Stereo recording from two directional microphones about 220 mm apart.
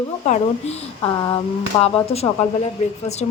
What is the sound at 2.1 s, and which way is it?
Speech, 30° left (ahead or behind).